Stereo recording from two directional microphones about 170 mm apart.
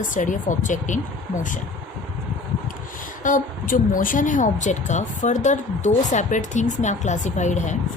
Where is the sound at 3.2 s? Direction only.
50° left (ahead or behind).